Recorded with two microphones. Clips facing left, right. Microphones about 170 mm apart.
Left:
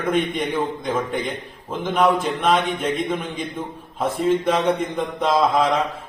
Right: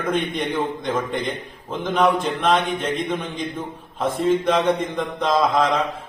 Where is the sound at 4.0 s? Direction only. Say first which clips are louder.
Even; 5° left (ahead or behind).